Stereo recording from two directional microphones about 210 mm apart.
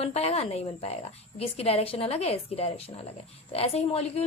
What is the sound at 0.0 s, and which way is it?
A woman's voice, 30° left (ahead or behind).